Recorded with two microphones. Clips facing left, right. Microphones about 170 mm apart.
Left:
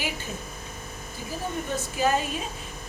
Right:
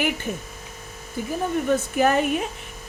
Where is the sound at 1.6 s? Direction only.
60° right (ahead or behind).